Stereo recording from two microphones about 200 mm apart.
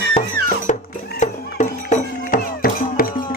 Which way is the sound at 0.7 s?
35° left (ahead or behind).